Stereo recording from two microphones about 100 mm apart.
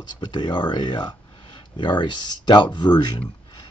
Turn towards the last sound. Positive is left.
turn(degrees=45)  # may be behind; listen again after turning